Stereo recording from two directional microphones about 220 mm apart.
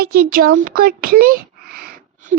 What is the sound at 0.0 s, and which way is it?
A child's voice, 40° right (ahead or behind).